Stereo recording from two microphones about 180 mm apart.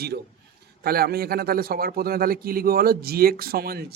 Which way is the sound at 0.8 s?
60° right (ahead or behind).